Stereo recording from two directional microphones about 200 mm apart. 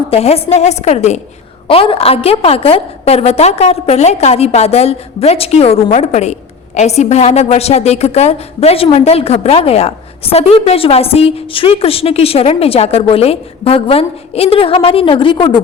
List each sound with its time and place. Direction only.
0.1 s a woman's voice: 30° left (ahead or behind)